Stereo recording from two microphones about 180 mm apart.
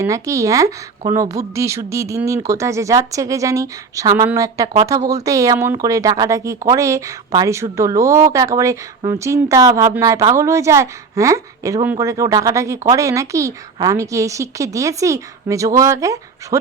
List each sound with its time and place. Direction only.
0.0 s speech: 15° right (ahead or behind)